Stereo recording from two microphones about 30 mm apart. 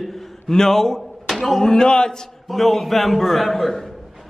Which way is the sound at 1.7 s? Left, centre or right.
Left.